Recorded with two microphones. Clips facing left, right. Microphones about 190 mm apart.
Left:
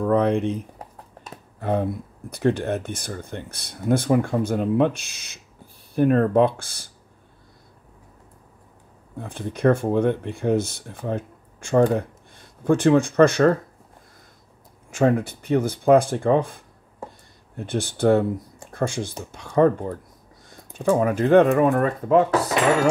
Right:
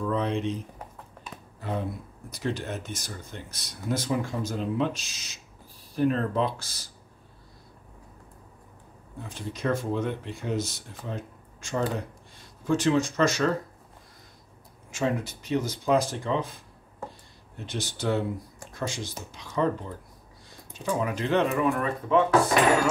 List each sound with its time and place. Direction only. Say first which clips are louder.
0.0 s speech: left 8 dB; 55° left (ahead or behind)
0.7 s a sound: left 2 dB; 40° left (ahead or behind)
2.3 s speech: left 9 dB; 60° left (ahead or behind)
9.2 s speech: left 10 dB; 55° left (ahead or behind)
14.9 s speech: left 8 dB; 55° left (ahead or behind)